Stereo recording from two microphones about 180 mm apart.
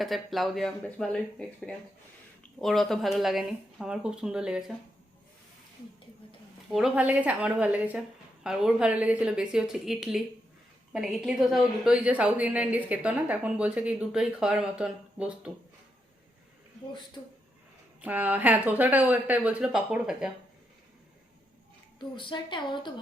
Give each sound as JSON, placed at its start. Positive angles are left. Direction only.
{"t": 0.0, "sound": "speech", "side_deg": 0}
{"t": 6.7, "sound": "a woman's voice", "side_deg": 0}
{"t": 18.0, "sound": "a woman's voice", "side_deg": -10}
{"t": 22.1, "sound": "a woman's voice", "side_deg": 25}